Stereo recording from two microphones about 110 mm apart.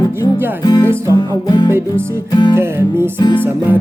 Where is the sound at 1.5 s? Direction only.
40° left (ahead or behind).